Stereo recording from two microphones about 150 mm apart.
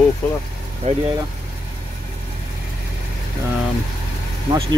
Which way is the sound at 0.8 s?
50° right (ahead or behind).